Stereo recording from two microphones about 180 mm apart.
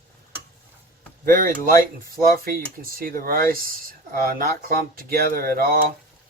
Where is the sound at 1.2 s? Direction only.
50° right (ahead or behind).